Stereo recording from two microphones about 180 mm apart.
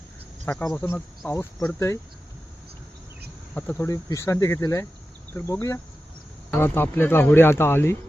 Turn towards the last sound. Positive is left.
turn(degrees=15)  # may be behind; listen again after turning